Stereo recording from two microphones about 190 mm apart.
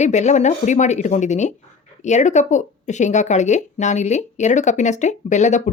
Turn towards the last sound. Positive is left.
turn(degrees=40)  # may be behind; listen again after turning